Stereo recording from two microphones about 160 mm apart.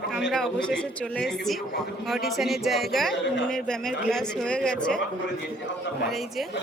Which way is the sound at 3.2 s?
90° left.